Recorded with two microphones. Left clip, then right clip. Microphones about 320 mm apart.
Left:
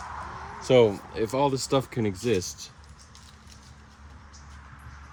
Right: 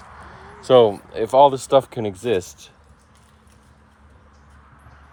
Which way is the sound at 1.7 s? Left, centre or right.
Centre.